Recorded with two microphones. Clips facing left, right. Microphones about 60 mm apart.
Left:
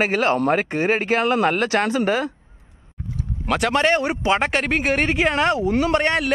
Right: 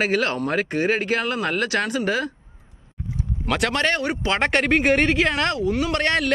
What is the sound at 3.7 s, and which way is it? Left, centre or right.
Speech, centre.